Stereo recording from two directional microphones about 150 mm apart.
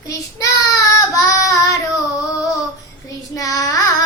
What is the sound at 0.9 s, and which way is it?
Child singing, 20° left (ahead or behind).